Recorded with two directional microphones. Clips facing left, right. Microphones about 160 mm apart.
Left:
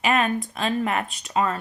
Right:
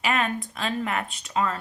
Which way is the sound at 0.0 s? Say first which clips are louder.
Left 4 dB; 40° left (ahead or behind).